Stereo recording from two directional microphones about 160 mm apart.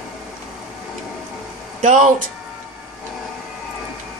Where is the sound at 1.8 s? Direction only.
55° right (ahead or behind).